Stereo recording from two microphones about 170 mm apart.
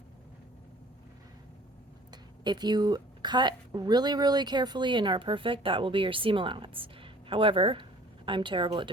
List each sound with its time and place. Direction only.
2.4 s a woman's voice: 25° right (ahead or behind)